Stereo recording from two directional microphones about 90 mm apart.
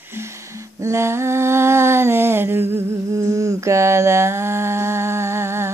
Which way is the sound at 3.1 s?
40° right (ahead or behind).